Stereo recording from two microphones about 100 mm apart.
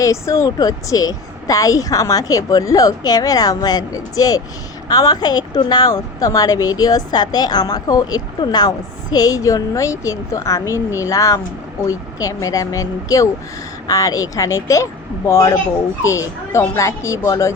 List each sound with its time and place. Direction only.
0.0 s a woman's voice: 30° left (ahead or behind)